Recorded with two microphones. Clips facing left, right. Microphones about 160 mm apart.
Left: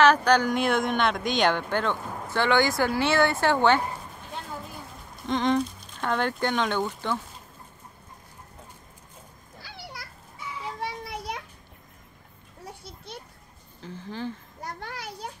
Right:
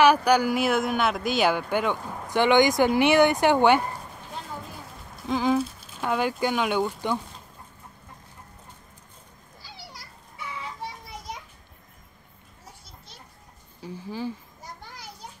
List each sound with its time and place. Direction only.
0.0 s speech: 10° right (ahead or behind)
5.2 s speech: 5° right (ahead or behind)
9.6 s a sound: 60° left (ahead or behind)
10.4 s child singing: 65° right (ahead or behind)
10.8 s children playing: 70° left (ahead or behind)
12.6 s children playing: 60° left (ahead or behind)
13.7 s speech: 10° right (ahead or behind)
14.6 s children playing: 70° left (ahead or behind)